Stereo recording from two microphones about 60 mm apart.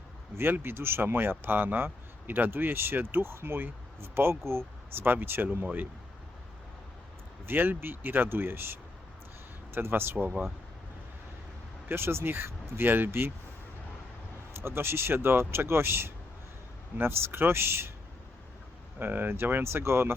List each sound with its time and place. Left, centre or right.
0.3 s speech: right
7.4 s speech: right
11.9 s speech: right
14.5 s speech: right
18.9 s speech: right